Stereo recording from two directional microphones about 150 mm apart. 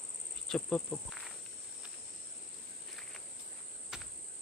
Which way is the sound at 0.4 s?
5° left (ahead or behind).